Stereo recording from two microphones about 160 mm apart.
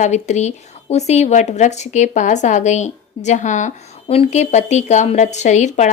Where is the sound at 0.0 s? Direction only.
45° left (ahead or behind).